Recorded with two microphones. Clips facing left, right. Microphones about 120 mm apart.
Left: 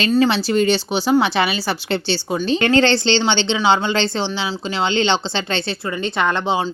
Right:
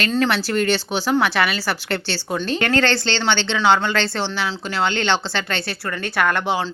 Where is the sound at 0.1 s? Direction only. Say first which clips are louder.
Left 6 dB; 15° left (ahead or behind).